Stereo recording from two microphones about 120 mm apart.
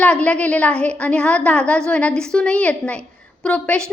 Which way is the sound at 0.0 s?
10° left (ahead or behind).